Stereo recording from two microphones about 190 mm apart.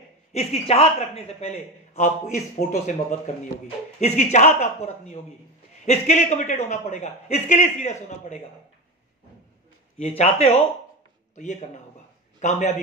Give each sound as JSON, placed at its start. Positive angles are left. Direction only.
{"t": 0.3, "sound": "a man's voice", "side_deg": 35}
{"t": 9.9, "sound": "a man's voice", "side_deg": 35}